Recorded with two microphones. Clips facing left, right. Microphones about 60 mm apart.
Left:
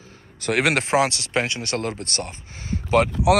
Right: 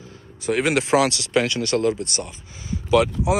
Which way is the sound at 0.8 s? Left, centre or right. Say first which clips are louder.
Right 1 dB; left.